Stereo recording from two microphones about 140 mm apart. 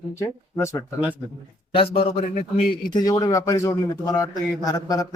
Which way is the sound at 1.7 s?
45° left (ahead or behind).